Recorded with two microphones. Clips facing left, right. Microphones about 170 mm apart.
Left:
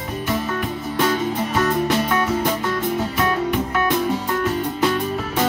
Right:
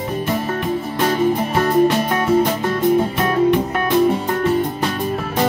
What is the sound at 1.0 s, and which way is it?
Music, 30° right (ahead or behind).